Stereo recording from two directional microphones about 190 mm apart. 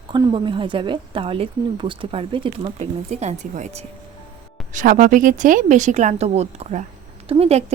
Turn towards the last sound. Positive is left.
turn(degrees=-30)  # may be behind; listen again after turning